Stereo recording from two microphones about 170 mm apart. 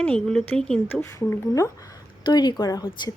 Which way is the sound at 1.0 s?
15° left (ahead or behind).